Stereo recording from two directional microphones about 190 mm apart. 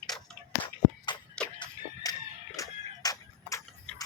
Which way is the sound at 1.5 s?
20° left (ahead or behind).